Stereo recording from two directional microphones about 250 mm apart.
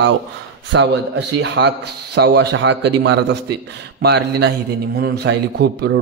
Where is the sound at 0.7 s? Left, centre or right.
Right.